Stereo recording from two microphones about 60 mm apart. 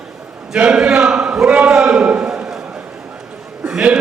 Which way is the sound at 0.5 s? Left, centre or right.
Centre.